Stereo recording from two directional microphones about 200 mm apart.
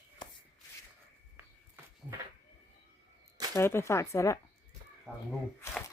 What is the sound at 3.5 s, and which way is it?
Speech, 15° left (ahead or behind).